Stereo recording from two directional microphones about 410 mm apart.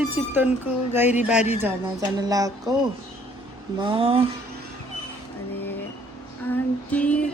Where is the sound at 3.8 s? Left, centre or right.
Centre.